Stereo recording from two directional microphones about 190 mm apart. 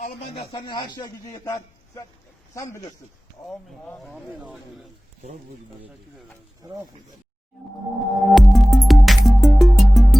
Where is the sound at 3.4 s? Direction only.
5° left (ahead or behind).